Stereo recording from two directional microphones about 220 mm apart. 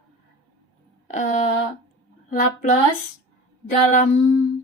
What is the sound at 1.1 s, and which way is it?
Speech, 35° left (ahead or behind).